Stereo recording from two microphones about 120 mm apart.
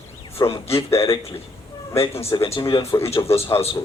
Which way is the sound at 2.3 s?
45° left (ahead or behind).